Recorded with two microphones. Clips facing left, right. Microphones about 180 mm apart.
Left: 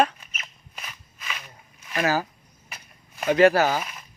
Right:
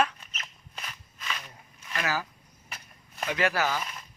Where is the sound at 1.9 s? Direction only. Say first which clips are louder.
Left 7 dB; 35° left (ahead or behind).